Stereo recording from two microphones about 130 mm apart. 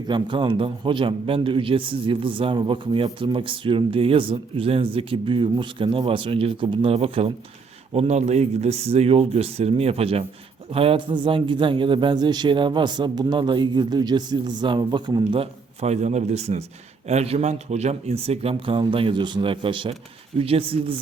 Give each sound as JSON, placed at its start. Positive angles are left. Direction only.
{"t": 0.1, "sound": "a man's voice", "side_deg": -40}